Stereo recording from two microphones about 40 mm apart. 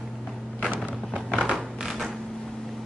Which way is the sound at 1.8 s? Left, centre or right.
Centre.